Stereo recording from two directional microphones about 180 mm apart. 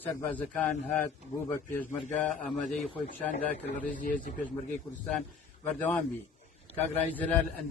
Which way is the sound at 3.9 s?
45° left (ahead or behind).